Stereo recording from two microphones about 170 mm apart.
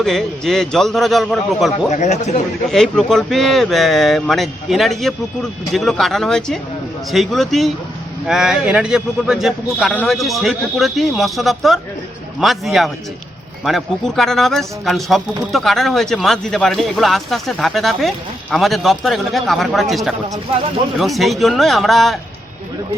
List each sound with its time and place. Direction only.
0.0 s a man's voice: centre (ahead or behind)
1.9 s speech: 40° left (ahead or behind)
2.7 s a man's voice: 5° left (ahead or behind)